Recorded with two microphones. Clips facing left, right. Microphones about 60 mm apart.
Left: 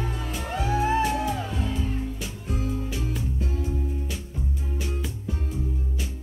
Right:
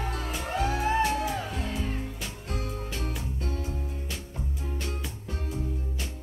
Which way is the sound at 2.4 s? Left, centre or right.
Right.